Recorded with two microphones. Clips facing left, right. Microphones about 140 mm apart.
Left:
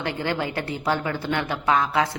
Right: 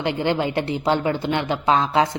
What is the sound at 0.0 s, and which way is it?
A woman's voice, 20° right (ahead or behind).